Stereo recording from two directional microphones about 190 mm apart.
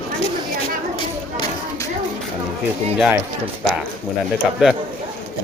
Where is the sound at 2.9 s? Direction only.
10° right (ahead or behind).